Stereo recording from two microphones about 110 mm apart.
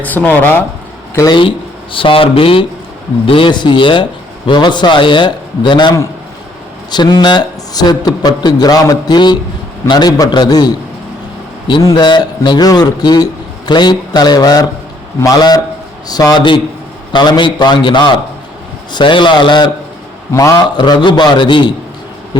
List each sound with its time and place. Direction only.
0.0 s speech: 15° left (ahead or behind)
1.3 s a man's voice: 50° left (ahead or behind)
6.9 s a man's voice: 45° left (ahead or behind)
11.8 s a man's voice: 35° left (ahead or behind)
20.3 s a man's voice: 30° left (ahead or behind)
20.7 s a man's voice: 45° left (ahead or behind)